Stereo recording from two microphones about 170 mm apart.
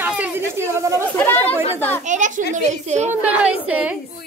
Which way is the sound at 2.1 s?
45° right (ahead or behind).